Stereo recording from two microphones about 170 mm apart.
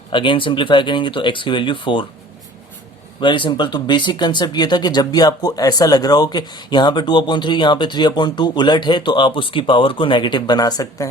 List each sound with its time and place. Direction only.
0.1 s speech: 30° left (ahead or behind)
3.2 s speech: 30° left (ahead or behind)